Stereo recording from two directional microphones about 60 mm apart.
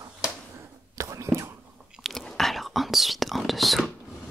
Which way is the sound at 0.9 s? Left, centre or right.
Right.